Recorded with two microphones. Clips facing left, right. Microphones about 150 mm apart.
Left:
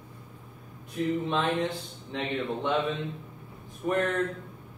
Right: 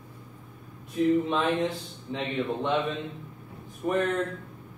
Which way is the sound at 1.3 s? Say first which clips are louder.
Right 1 dB; centre (ahead or behind).